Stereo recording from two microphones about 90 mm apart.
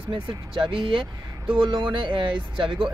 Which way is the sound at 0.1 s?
65° right (ahead or behind).